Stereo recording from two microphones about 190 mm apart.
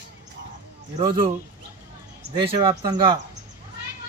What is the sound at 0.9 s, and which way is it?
Speech, 25° right (ahead or behind).